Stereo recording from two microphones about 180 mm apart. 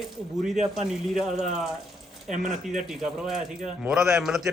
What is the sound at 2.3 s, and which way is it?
Speech, 45° right (ahead or behind).